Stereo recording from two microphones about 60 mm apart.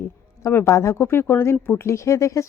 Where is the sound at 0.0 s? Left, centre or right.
Left.